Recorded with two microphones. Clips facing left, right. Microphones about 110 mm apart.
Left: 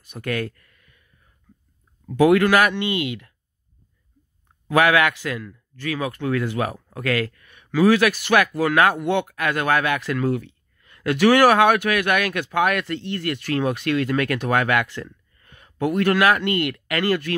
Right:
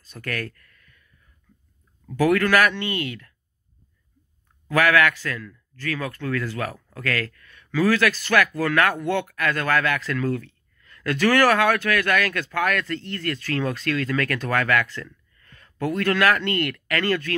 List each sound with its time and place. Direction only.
0.0 s speech: 15° left (ahead or behind)
2.0 s speech: 15° left (ahead or behind)
4.6 s speech: 15° left (ahead or behind)